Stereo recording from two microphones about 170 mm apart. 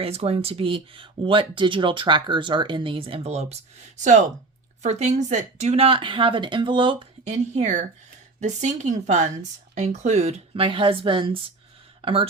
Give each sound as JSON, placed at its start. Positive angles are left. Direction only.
{"t": 0.0, "sound": "speech", "side_deg": -35}
{"t": 7.3, "sound": "speech", "side_deg": -45}